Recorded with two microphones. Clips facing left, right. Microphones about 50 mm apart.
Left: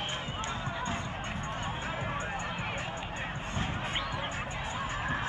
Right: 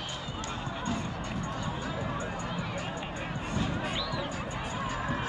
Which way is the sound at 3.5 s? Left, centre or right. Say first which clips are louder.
Right 3 dB; left.